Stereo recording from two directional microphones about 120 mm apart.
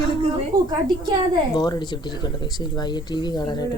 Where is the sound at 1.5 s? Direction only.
30° left (ahead or behind).